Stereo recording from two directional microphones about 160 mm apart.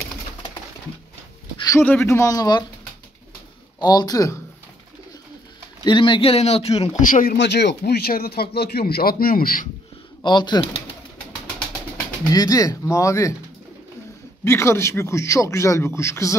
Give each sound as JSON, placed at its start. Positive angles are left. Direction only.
{"t": 1.6, "sound": "a sound", "side_deg": 20}
{"t": 1.9, "sound": "speech", "side_deg": 15}
{"t": 3.8, "sound": "speech", "side_deg": 25}
{"t": 5.9, "sound": "speech", "side_deg": 30}
{"t": 7.0, "sound": "speech", "side_deg": 55}
{"t": 7.3, "sound": "speech", "side_deg": 90}
{"t": 10.2, "sound": "speech", "side_deg": 25}
{"t": 12.3, "sound": "speech", "side_deg": 20}
{"t": 14.4, "sound": "speech", "side_deg": 15}